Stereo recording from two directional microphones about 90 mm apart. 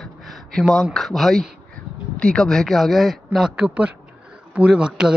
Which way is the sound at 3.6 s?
15° right (ahead or behind).